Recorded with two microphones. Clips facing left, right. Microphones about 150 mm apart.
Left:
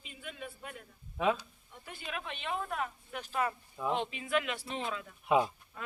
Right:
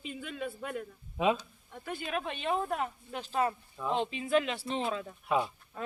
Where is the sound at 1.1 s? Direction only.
15° right (ahead or behind).